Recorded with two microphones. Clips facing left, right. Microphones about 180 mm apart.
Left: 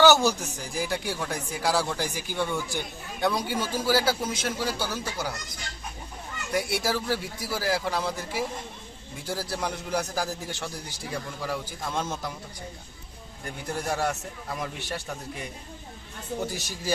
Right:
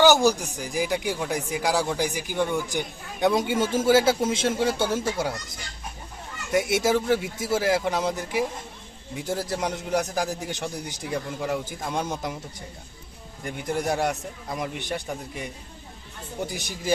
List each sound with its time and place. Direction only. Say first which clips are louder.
0.0 s a man's voice: right 2 dB; 15° right (ahead or behind)
6.5 s a man's voice: right 6 dB; 20° right (ahead or behind)
13.4 s speech: right 5 dB; 15° right (ahead or behind)
16.5 s speech: right 2 dB; 20° right (ahead or behind)